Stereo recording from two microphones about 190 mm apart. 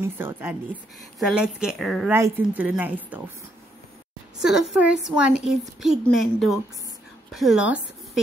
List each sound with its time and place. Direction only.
0.0 s a woman's voice: 10° right (ahead or behind)
2.1 s a woman's voice: 10° right (ahead or behind)
4.4 s a woman's voice: 5° right (ahead or behind)